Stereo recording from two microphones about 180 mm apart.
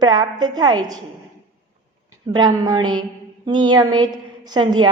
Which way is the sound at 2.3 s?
25° right (ahead or behind).